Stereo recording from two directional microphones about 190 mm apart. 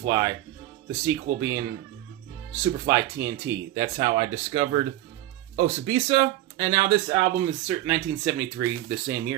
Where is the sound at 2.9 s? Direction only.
15° right (ahead or behind).